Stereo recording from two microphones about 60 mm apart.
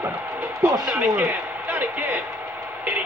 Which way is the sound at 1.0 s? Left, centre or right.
Right.